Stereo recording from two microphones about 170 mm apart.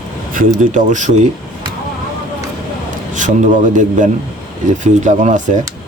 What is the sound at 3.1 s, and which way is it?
Speech, 45° right (ahead or behind).